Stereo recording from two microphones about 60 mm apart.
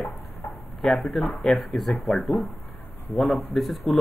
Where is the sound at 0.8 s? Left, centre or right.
Centre.